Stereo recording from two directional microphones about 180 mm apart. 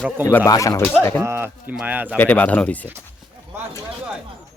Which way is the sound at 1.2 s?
15° right (ahead or behind).